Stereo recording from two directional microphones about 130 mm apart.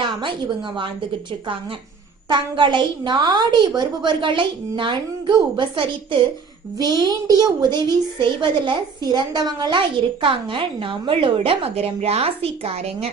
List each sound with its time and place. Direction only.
0.0 s a child's voice: 40° right (ahead or behind)
2.3 s a child's voice: 35° right (ahead or behind)